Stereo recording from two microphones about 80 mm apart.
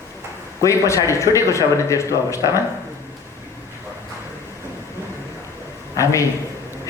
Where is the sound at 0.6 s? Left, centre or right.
Left.